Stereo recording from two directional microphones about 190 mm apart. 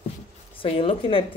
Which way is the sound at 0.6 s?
30° left (ahead or behind).